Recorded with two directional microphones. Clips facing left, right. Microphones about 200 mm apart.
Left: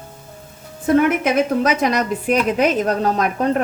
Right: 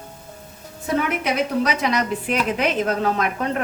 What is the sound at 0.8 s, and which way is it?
A woman's voice, 50° left (ahead or behind).